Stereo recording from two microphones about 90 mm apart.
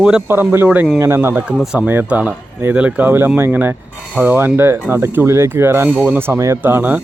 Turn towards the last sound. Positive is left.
turn(degrees=-20)  # may be behind; listen again after turning